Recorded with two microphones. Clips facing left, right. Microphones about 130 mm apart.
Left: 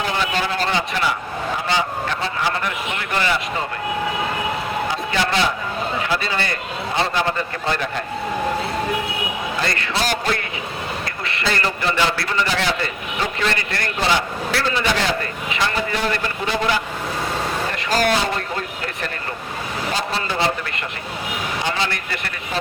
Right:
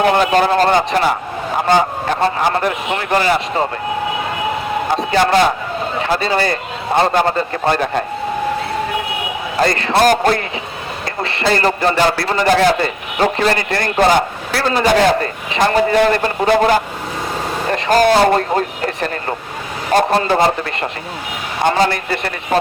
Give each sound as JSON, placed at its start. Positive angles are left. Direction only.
{"t": 0.0, "sound": "a man's voice", "side_deg": -55}
{"t": 4.9, "sound": "a man's voice", "side_deg": -45}
{"t": 6.0, "sound": "a man's voice", "side_deg": -35}
{"t": 9.6, "sound": "a man's voice", "side_deg": -35}
{"t": 9.9, "sound": "a man's voice", "side_deg": -50}
{"t": 11.2, "sound": "a sound", "side_deg": -30}
{"t": 11.4, "sound": "a man's voice", "side_deg": -40}
{"t": 14.0, "sound": "a man's voice", "side_deg": -45}
{"t": 19.9, "sound": "speech", "side_deg": -55}
{"t": 21.6, "sound": "a man's voice", "side_deg": -45}